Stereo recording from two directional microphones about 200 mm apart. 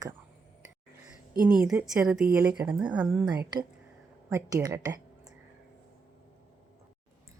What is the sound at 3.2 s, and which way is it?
A woman's voice, 20° right (ahead or behind).